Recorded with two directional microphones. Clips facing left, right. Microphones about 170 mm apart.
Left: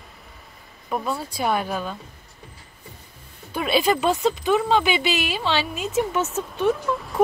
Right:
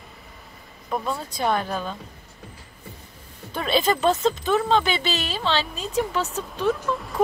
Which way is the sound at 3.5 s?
10° left (ahead or behind).